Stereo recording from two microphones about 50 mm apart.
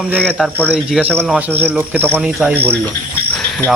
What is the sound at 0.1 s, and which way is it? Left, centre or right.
Speech, left.